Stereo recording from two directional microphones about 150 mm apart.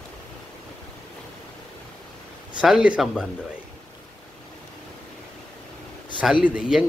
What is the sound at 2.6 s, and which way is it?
Speech, 5° right (ahead or behind).